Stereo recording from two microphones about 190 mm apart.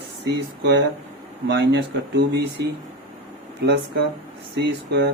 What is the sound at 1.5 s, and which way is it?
Speech, 65° right (ahead or behind).